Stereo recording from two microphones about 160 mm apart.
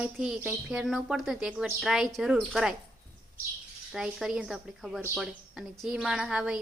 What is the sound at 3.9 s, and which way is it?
A woman's voice, 5° right (ahead or behind).